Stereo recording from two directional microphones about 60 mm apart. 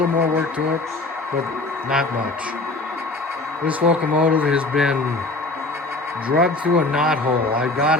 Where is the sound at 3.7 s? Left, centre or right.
Right.